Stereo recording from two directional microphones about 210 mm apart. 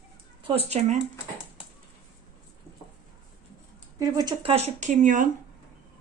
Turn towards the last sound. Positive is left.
turn(degrees=-40)  # may be behind; listen again after turning